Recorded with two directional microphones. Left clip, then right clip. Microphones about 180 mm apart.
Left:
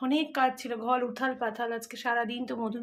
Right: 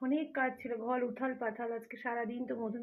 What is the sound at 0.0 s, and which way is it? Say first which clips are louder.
Speech: left 7 dB; 15° left (ahead or behind).